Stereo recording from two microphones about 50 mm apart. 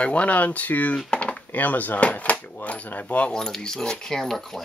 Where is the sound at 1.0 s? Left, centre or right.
Left.